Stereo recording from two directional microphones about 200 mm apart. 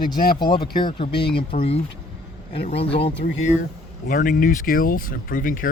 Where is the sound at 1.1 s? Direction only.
55° left (ahead or behind).